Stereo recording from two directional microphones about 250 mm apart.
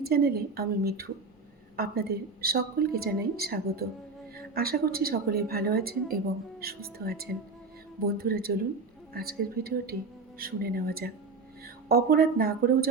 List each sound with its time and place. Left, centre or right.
0.0 s a woman's voice: right